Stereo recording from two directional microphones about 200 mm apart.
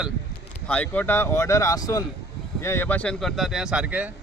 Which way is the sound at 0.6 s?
5° left (ahead or behind).